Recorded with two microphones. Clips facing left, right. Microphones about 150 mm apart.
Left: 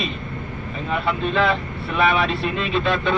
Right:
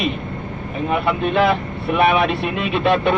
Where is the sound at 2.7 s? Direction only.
65° right (ahead or behind).